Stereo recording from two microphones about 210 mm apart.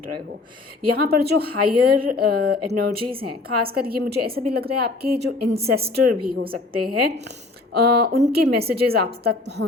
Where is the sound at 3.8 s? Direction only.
45° right (ahead or behind).